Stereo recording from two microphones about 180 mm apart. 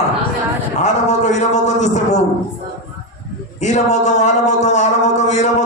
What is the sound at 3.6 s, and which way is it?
A man's voice, 40° left (ahead or behind).